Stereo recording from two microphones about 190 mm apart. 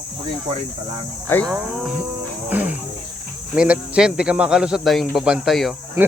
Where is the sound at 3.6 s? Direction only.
5° right (ahead or behind).